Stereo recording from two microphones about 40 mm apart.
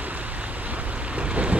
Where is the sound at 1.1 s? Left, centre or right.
Right.